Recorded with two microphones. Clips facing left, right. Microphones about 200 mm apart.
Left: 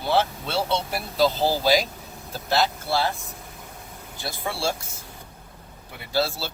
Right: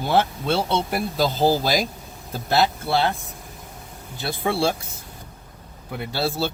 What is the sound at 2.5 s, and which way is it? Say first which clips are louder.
Speech: right 3 dB; 60° right (ahead or behind).